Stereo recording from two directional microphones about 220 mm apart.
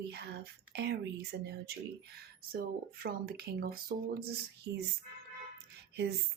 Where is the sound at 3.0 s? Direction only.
45° right (ahead or behind).